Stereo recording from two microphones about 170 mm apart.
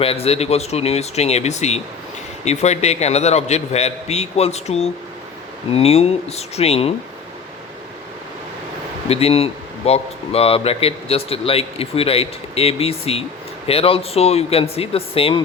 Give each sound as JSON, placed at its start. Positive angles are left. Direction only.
{"t": 0.0, "sound": "speech", "side_deg": 35}
{"t": 9.0, "sound": "speech", "side_deg": 35}